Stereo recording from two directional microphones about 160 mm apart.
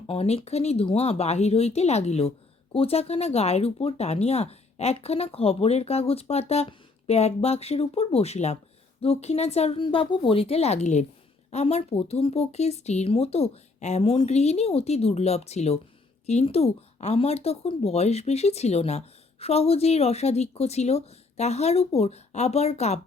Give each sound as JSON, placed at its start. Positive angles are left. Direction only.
{"t": 0.1, "sound": "speech", "side_deg": 35}